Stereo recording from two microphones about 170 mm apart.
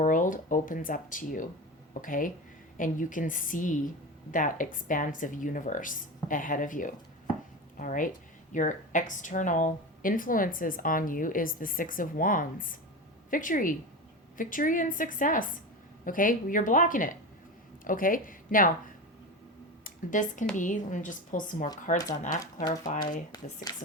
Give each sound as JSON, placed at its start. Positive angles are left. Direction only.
{"t": 0.0, "sound": "a woman's voice", "side_deg": 50}
{"t": 19.8, "sound": "speech", "side_deg": 50}
{"t": 22.3, "sound": "speech", "side_deg": 20}
{"t": 22.7, "sound": "speech", "side_deg": 45}
{"t": 23.3, "sound": "speech", "side_deg": 25}